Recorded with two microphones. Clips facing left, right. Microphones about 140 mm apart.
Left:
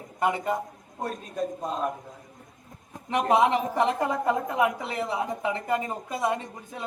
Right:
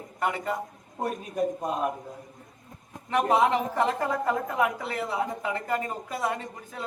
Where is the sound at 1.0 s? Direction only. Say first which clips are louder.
Right 3 dB; 10° right (ahead or behind).